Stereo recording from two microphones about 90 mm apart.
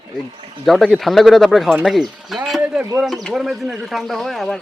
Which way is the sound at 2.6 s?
15° right (ahead or behind).